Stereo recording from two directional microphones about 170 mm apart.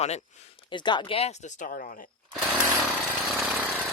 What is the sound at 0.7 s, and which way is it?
Speech, 25° left (ahead or behind).